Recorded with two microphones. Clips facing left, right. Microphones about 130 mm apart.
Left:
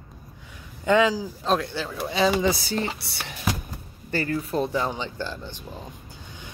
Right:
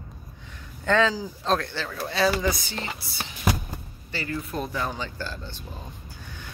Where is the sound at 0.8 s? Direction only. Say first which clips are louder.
Left 2 dB; 10° left (ahead or behind).